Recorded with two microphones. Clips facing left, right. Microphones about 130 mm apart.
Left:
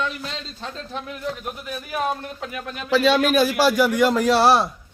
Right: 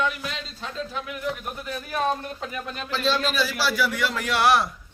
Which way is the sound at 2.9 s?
65° left (ahead or behind).